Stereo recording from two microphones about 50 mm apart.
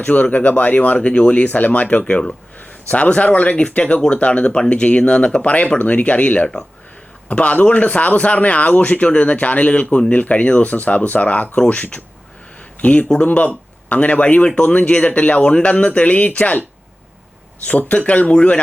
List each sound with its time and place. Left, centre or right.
0.0 s speech: left
17.7 s speech: left